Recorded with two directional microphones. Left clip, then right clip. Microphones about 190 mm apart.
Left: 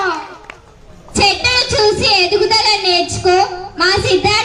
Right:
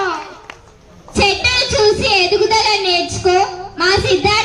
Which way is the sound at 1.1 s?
30° left (ahead or behind).